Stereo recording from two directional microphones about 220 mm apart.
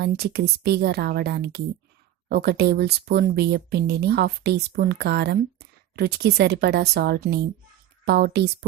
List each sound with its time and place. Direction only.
0.0 s speech: 45° right (ahead or behind)